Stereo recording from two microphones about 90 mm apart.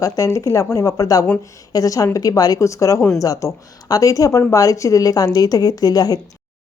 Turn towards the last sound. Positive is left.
turn(degrees=45)  # may be behind; listen again after turning